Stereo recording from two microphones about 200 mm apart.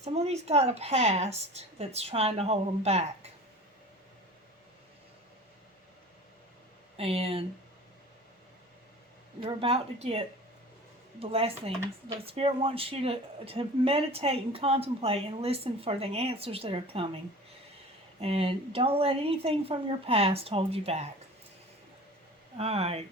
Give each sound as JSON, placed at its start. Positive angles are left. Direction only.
{"t": 0.0, "sound": "speech", "side_deg": -30}
{"t": 6.9, "sound": "speech", "side_deg": -30}
{"t": 9.4, "sound": "speech", "side_deg": -25}
{"t": 18.2, "sound": "speech", "side_deg": -30}
{"t": 22.5, "sound": "speech", "side_deg": -30}